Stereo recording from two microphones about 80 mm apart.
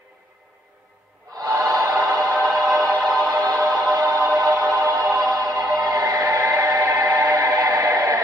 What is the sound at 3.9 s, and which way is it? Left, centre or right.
Music, right.